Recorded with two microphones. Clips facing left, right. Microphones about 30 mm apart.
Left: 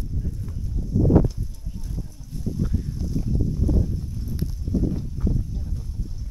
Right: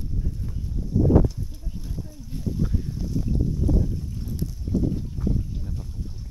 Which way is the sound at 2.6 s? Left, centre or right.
Centre.